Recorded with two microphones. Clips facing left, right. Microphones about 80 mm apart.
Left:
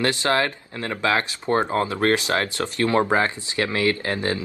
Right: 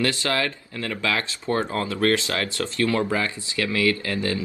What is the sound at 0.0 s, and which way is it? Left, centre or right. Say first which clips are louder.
Speech: left 3 dB; left.